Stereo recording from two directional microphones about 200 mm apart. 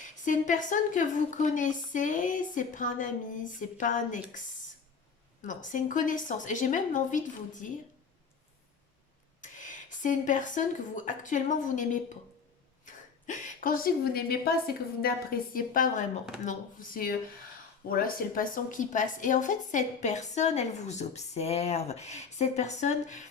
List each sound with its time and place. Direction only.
0.0 s a woman's voice: 40° left (ahead or behind)
9.4 s a woman's voice: 40° left (ahead or behind)